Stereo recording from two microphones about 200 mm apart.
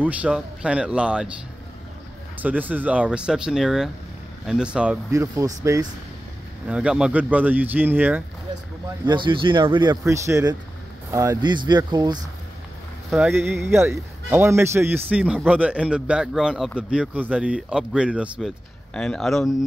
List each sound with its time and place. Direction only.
0.0 s speech: 5° right (ahead or behind)
2.3 s speech: 10° right (ahead or behind)
5.1 s a man's voice: 15° right (ahead or behind)
6.7 s a man's voice: 5° right (ahead or behind)
9.0 s speech: 25° right (ahead or behind)
13.1 s a man's voice: 5° right (ahead or behind)